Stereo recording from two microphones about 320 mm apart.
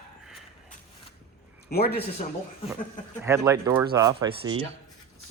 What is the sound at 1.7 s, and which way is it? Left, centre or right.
Speech, left.